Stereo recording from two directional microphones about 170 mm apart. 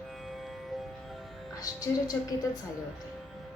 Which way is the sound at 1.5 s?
20° left (ahead or behind).